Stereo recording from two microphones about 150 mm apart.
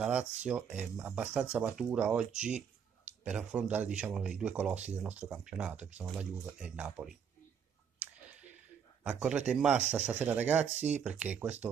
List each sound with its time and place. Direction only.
0.0 s speech: 10° right (ahead or behind)
9.0 s speech: 10° right (ahead or behind)
10.7 s speech: 45° right (ahead or behind)
11.0 s speech: 5° right (ahead or behind)